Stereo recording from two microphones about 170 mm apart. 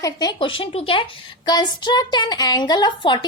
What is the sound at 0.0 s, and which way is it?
A woman's voice, 25° left (ahead or behind).